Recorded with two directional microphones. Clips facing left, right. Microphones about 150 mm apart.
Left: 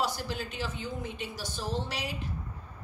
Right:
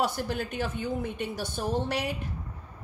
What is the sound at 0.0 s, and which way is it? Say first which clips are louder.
A woman's voice: right 4 dB; 55° right (ahead or behind).